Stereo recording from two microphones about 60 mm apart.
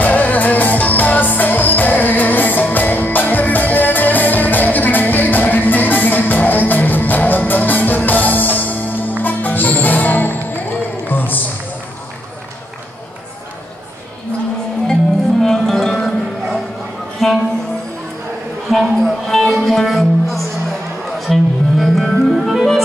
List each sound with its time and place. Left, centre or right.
0.0 s music: left
15.4 s music: centre
17.2 s music: centre
18.7 s music: centre